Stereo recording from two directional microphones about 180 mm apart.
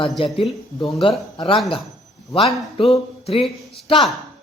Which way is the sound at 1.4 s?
25° left (ahead or behind).